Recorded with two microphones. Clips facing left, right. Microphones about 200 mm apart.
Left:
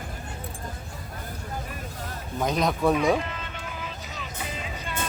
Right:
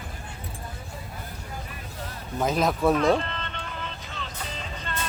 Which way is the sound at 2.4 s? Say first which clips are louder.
Right 1 dB; centre (ahead or behind).